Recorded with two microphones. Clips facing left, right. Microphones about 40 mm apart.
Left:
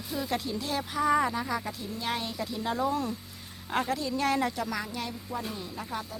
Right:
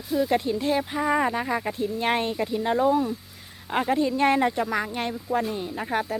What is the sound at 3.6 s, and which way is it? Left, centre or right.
Speech, centre.